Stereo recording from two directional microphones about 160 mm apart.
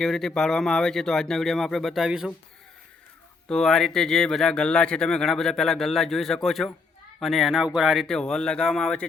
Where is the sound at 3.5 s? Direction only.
5° left (ahead or behind).